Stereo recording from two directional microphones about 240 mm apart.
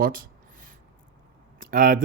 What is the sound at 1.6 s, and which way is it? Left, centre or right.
Speech, right.